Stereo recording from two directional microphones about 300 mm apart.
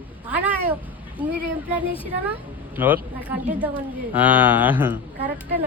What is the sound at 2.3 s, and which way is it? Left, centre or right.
Speech, centre.